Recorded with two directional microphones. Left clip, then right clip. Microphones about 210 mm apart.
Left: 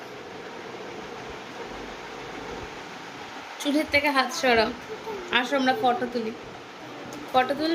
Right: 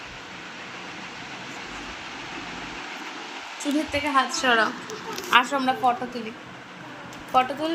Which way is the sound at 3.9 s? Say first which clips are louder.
Even; 10° left (ahead or behind).